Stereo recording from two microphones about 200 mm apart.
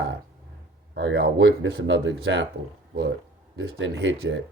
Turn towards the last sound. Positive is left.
turn(degrees=-65)  # may be behind; listen again after turning